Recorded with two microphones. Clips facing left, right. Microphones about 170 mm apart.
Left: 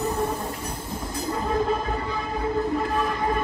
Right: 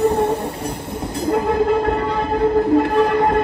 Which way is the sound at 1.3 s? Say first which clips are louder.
Right 8 dB; 70° right (ahead or behind).